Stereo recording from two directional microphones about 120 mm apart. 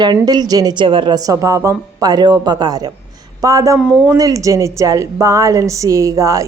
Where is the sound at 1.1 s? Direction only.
30° right (ahead or behind).